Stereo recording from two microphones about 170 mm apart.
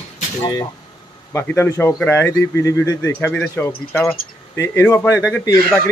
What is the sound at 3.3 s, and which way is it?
Speech, 5° left (ahead or behind).